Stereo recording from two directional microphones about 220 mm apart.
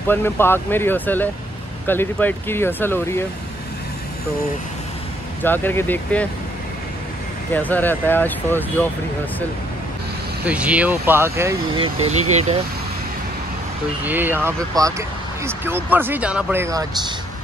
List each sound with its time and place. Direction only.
0.1 s speech: 10° left (ahead or behind)
5.4 s speech: 10° left (ahead or behind)
7.5 s speech: 10° left (ahead or behind)
10.4 s speech: 5° right (ahead or behind)
11.7 s speech: 25° right (ahead or behind)
14.0 s speech: 10° right (ahead or behind)